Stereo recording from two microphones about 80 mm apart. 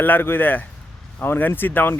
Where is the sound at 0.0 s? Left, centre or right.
Left.